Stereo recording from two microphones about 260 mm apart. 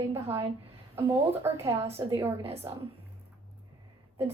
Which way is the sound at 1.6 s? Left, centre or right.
Centre.